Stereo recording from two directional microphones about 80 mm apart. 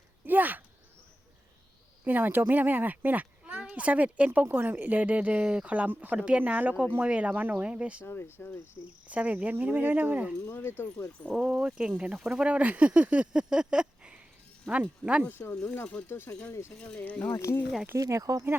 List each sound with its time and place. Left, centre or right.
0.3 s a sound: right
2.0 s speech: right
8.0 s speech: left
9.0 s speech: centre
10.5 s speech: left
11.3 s speech: centre
15.2 s speech: left
16.7 s speech: centre
17.3 s speech: left
17.9 s speech: right